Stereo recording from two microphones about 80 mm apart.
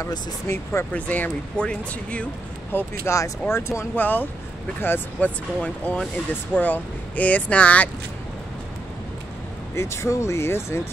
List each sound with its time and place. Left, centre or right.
0.5 s speech: left
0.9 s speech: centre
2.7 s speech: left
3.9 s speech: left
5.6 s speech: centre
9.8 s speech: left